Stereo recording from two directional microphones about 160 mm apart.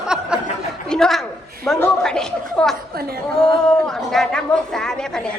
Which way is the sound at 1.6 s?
5° left (ahead or behind).